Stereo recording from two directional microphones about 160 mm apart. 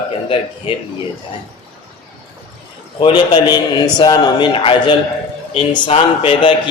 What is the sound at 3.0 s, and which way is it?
A man's voice, 30° left (ahead or behind).